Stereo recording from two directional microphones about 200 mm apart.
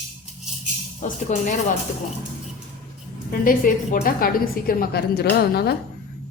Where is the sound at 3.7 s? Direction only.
40° left (ahead or behind).